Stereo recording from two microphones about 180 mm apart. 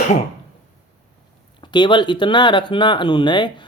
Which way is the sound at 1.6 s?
25° left (ahead or behind).